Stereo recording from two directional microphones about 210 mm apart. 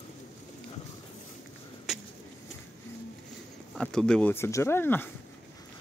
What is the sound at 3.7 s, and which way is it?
Speech, 5° left (ahead or behind).